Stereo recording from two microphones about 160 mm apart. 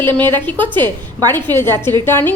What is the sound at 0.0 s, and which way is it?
Speech, 30° right (ahead or behind).